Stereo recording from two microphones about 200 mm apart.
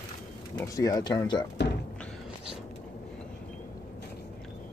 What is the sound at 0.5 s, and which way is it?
Speech, 15° left (ahead or behind).